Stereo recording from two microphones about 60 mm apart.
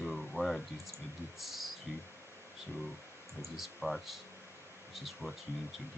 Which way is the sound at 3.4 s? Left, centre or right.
Centre.